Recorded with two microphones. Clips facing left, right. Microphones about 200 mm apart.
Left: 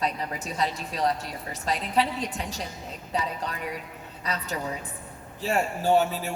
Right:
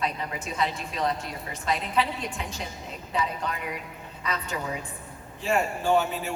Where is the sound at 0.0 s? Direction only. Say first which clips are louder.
Left 1 dB; 40° left (ahead or behind).